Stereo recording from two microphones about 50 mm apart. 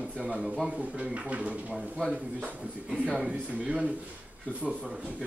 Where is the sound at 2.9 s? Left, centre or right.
Right.